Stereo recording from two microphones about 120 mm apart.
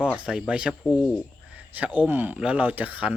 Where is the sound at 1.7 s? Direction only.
10° right (ahead or behind).